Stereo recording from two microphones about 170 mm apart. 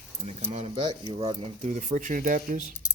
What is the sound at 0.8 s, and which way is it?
Speech, 25° right (ahead or behind).